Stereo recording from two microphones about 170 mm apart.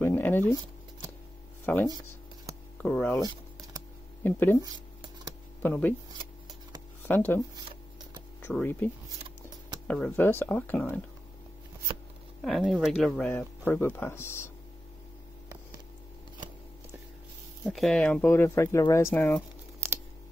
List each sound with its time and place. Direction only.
0.0 s a sound: 10° left (ahead or behind)
1.7 s speech: 10° left (ahead or behind)
3.2 s a sound: 25° right (ahead or behind)
4.2 s speech: 10° left (ahead or behind)
5.6 s speech: 10° left (ahead or behind)
7.1 s speech: 10° left (ahead or behind)
12.4 s speech: centre (ahead or behind)
17.6 s speech: 5° left (ahead or behind)